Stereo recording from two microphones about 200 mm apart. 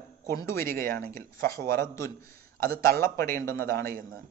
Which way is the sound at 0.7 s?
45° right (ahead or behind).